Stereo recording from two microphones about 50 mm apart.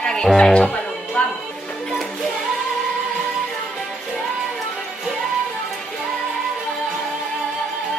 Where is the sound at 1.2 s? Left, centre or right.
Left.